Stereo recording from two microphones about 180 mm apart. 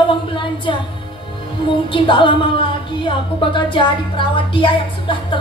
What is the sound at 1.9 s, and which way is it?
Music, 30° left (ahead or behind).